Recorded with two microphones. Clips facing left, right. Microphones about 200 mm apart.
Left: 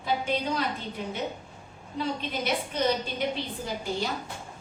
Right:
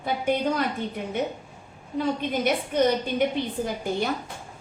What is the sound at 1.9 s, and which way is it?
A woman's voice, 50° right (ahead or behind).